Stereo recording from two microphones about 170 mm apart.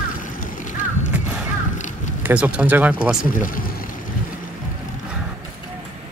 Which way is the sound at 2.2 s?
5° right (ahead or behind).